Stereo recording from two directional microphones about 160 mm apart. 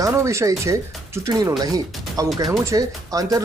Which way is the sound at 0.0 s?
20° right (ahead or behind).